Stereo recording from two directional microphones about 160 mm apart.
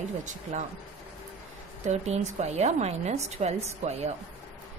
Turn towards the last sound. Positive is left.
turn(degrees=-45)  # may be behind; listen again after turning